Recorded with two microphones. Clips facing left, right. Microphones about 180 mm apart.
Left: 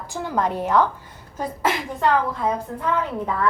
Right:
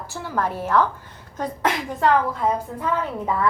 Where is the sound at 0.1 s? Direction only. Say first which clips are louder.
Left 3 dB; 15° left (ahead or behind).